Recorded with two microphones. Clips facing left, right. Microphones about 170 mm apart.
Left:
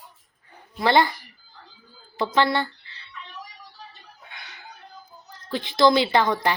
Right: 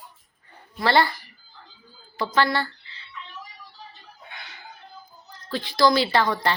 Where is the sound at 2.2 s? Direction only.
20° left (ahead or behind).